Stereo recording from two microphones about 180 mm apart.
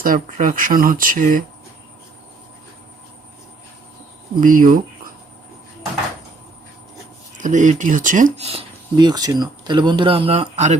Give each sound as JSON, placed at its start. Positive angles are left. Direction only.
{"t": 0.0, "sound": "speech", "side_deg": -50}
{"t": 4.4, "sound": "speech", "side_deg": -50}
{"t": 7.3, "sound": "speech", "side_deg": -45}
{"t": 8.4, "sound": "speech", "side_deg": -30}